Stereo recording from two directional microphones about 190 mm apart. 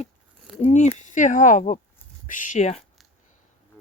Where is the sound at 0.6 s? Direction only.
40° left (ahead or behind).